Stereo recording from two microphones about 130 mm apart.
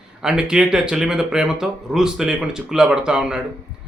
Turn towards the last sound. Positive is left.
turn(degrees=-5)  # may be behind; listen again after turning